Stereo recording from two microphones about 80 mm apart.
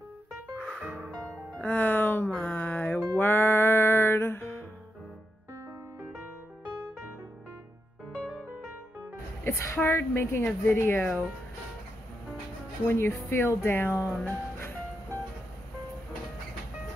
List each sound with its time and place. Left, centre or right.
0.6 s music: centre
1.6 s music: centre
9.4 s music: left
9.8 s a woman's voice: left
12.8 s speech: left
13.9 s speech: centre
14.2 s music: left